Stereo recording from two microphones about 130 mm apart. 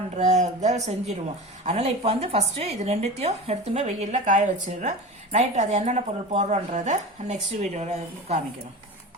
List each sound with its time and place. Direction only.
0.2 s speech: 65° right (ahead or behind)